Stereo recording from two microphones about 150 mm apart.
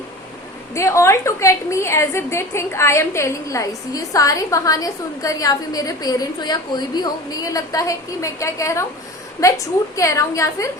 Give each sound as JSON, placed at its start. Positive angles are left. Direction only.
{"t": 0.7, "sound": "a woman's voice", "side_deg": 20}